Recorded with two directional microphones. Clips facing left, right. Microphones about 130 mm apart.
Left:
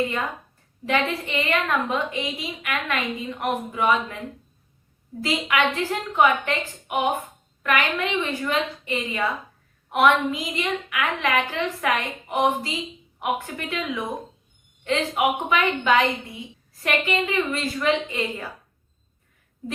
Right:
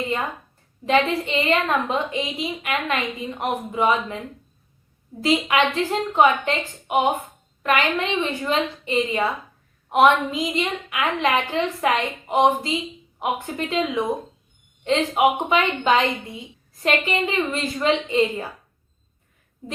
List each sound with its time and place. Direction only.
0.9 s a woman's voice: 20° right (ahead or behind)
5.2 s a woman's voice: 25° right (ahead or behind)